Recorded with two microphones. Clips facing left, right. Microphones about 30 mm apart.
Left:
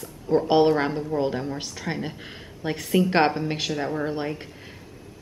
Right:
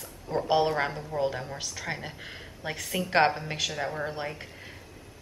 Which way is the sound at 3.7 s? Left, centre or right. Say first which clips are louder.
Left 5 dB; centre.